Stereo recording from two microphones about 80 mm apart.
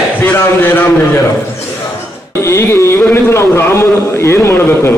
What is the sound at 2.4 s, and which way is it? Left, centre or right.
A man's voice, left.